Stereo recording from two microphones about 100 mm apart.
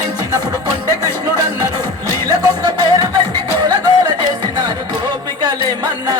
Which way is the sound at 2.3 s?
40° right (ahead or behind).